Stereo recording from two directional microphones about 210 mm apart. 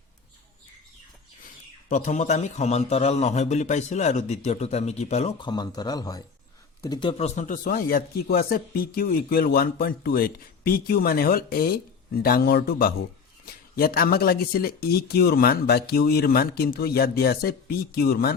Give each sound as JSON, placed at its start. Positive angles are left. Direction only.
{"t": 1.9, "sound": "a man's voice", "side_deg": 35}